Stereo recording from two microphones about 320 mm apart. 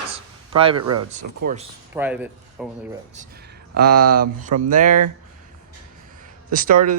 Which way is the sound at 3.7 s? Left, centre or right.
Right.